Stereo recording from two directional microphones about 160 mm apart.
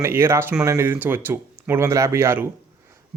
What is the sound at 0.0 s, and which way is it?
Speech, 15° right (ahead or behind).